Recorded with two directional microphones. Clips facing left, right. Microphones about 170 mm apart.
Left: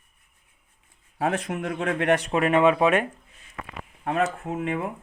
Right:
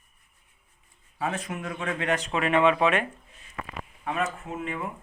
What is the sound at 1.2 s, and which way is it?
A man's voice, 70° left (ahead or behind).